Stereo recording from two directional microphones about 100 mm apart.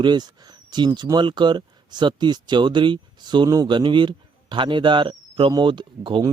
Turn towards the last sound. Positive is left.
turn(degrees=-50)  # may be behind; listen again after turning